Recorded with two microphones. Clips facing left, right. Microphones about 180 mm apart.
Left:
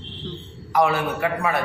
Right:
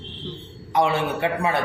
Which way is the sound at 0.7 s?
25° right (ahead or behind).